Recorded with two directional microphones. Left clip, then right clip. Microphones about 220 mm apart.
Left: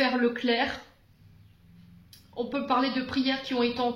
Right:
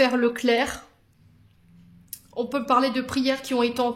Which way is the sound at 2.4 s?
55° right (ahead or behind).